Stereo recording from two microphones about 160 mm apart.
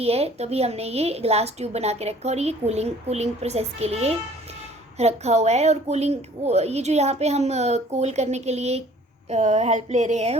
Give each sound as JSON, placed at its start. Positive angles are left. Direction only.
{"t": 0.0, "sound": "a woman's voice", "side_deg": -40}